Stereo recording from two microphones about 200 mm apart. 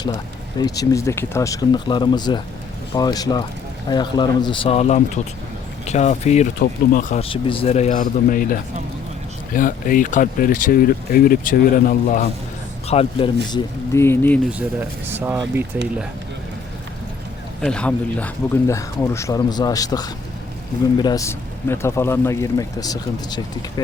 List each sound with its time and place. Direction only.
0.6 s speech: 15° left (ahead or behind); by 7.2 s 45° left (ahead or behind)
7.2 s speech: 25° left (ahead or behind)
12.9 s speech: 30° left (ahead or behind)
13.9 s speech: 10° left (ahead or behind)
14.8 s speech: 10° right (ahead or behind)
17.6 s speech: 5° left (ahead or behind)